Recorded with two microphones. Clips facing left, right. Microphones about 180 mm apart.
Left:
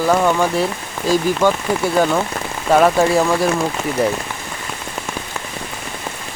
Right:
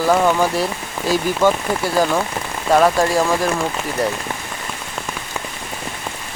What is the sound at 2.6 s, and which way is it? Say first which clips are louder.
Speech: left 2 dB; centre (ahead or behind).